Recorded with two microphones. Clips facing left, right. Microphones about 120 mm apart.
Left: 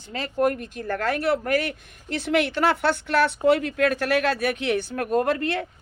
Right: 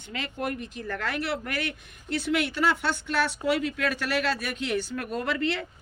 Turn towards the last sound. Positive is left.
turn(degrees=50)  # may be behind; listen again after turning